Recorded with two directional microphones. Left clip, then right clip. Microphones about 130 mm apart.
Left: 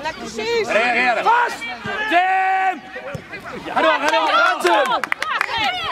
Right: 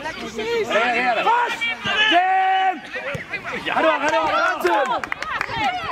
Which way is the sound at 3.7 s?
35° left (ahead or behind).